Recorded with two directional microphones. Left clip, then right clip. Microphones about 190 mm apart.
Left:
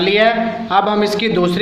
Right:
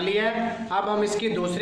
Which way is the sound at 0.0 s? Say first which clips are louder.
Left 11 dB; 40° left (ahead or behind).